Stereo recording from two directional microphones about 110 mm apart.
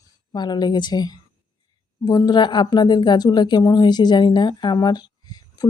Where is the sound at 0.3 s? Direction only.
40° left (ahead or behind).